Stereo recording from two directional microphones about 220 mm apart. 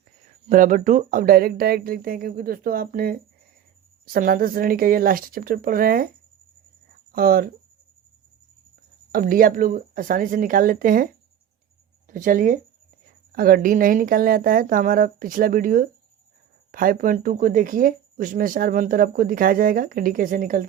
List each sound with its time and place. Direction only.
0.4 s speech: 35° right (ahead or behind)
7.1 s speech: 40° right (ahead or behind)
9.1 s speech: 40° right (ahead or behind)